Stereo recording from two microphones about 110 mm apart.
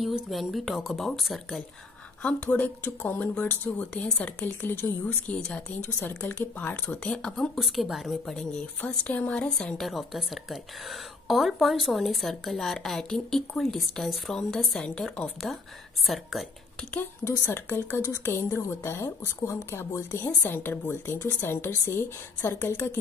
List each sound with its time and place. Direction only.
0.0 s speech: centre (ahead or behind)
2.2 s speech: 15° left (ahead or behind)
16.9 s a woman's voice: 20° left (ahead or behind)